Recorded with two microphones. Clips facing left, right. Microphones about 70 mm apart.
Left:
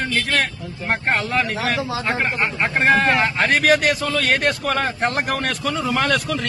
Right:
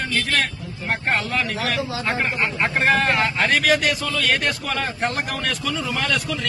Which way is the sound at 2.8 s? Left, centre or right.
Left.